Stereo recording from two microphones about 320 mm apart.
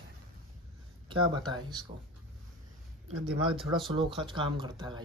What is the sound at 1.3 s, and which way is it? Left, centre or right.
Speech, centre.